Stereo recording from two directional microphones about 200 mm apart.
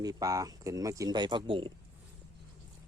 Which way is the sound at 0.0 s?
20° right (ahead or behind).